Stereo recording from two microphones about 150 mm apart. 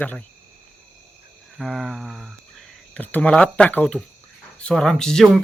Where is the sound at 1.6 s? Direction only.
Centre (ahead or behind).